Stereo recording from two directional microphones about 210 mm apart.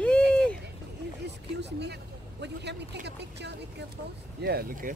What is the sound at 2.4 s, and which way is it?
A woman's voice, 55° right (ahead or behind).